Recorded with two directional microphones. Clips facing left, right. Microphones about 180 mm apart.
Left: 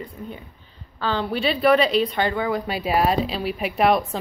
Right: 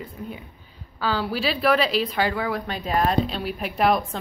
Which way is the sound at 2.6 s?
10° left (ahead or behind).